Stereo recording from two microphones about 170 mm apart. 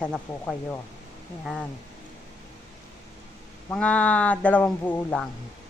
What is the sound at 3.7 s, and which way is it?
Speech, 10° left (ahead or behind).